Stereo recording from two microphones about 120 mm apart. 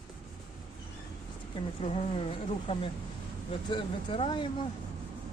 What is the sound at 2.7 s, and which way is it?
Speech, 45° left (ahead or behind).